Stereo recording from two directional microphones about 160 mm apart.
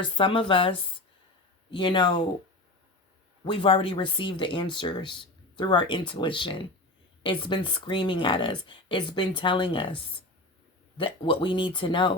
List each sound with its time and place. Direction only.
0.0 s speech: 30° left (ahead or behind)
3.4 s speech: 30° left (ahead or behind)